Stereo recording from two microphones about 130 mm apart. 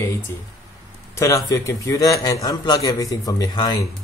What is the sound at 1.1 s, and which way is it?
A man's voice, 20° left (ahead or behind).